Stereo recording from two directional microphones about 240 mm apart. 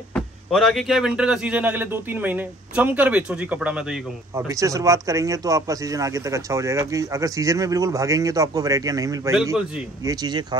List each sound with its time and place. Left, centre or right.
0.1 s speech: centre